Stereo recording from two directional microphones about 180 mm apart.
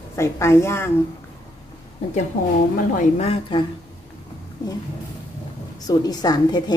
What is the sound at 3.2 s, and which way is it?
Speech, 30° left (ahead or behind).